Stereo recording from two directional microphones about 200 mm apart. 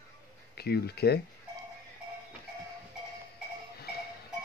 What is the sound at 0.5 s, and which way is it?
Speech, 55° left (ahead or behind).